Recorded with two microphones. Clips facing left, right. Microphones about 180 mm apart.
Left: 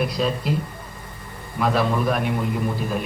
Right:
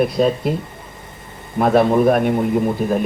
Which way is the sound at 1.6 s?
50° right (ahead or behind).